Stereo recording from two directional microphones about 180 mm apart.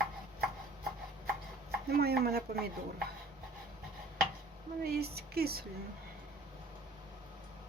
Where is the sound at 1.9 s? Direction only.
60° right (ahead or behind).